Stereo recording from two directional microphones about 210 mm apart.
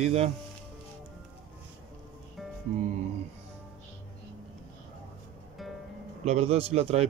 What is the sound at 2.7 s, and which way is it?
Speech, 35° right (ahead or behind).